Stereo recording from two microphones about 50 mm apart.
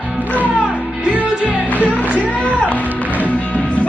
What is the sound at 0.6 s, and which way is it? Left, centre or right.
Music, right.